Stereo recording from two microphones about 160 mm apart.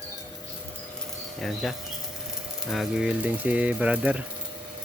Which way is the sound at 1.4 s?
Centre (ahead or behind).